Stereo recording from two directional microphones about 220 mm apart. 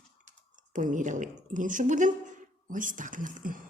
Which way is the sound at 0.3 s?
35° right (ahead or behind).